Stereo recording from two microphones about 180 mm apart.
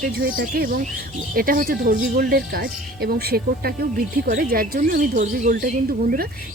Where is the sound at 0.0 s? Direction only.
50° right (ahead or behind).